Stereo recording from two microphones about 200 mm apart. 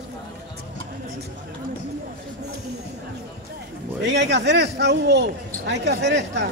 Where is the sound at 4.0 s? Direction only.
60° right (ahead or behind).